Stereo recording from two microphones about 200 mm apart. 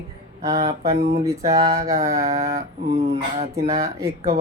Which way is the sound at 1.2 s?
15° right (ahead or behind).